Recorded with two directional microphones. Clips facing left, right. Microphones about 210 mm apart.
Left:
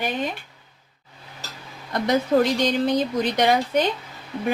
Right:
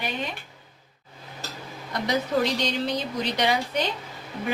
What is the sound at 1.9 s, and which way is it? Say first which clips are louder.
Speech: left 5 dB; 50° left (ahead or behind).